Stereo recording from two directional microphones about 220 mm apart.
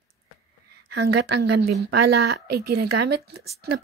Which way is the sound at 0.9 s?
45° right (ahead or behind).